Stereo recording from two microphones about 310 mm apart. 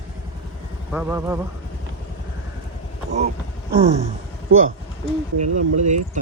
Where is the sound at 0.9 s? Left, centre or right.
Centre.